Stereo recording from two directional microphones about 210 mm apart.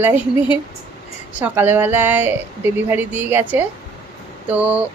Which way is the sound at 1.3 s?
10° right (ahead or behind).